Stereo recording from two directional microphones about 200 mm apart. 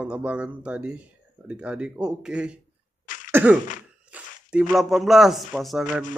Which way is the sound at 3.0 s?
40° left (ahead or behind).